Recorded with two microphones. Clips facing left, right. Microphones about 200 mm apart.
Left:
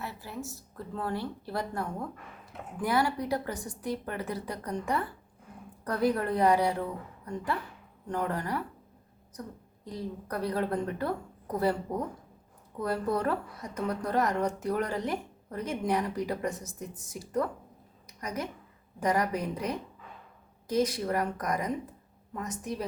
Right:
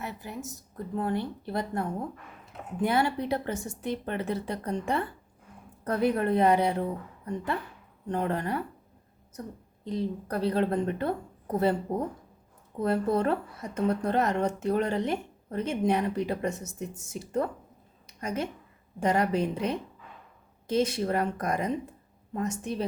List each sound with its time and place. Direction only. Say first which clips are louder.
0.0 s a woman's voice: right 1 dB; 20° right (ahead or behind)
9.8 s a woman's voice: right 6 dB; 25° right (ahead or behind)
18.0 s a sound: right 4 dB; 25° right (ahead or behind)
18.9 s a woman's voice: right 3 dB; 25° right (ahead or behind)